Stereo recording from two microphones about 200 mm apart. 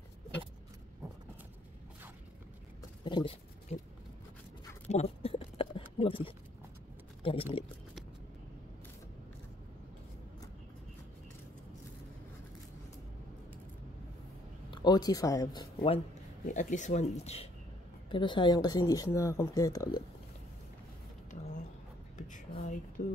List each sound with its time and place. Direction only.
3.0 s speech: 20° left (ahead or behind)
3.7 s speech: 35° left (ahead or behind)
4.8 s a sound: 30° left (ahead or behind)
7.2 s speech: 25° left (ahead or behind)
14.7 s speech: 20° left (ahead or behind)
16.4 s speech: 40° left (ahead or behind); by 20.0 s 15° left (ahead or behind)
22.1 s a sound: 40° left (ahead or behind)